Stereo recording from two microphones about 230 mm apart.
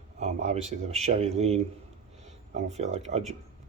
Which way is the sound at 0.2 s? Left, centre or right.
Right.